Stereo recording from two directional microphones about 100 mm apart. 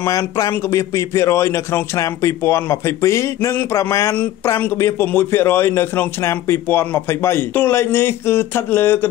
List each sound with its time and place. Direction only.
0.0 s a man's voice: 30° left (ahead or behind)